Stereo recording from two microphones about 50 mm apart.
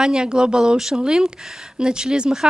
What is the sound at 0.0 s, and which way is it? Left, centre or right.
Speech, centre.